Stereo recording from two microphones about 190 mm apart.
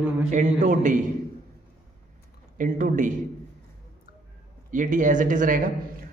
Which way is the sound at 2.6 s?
45° right (ahead or behind).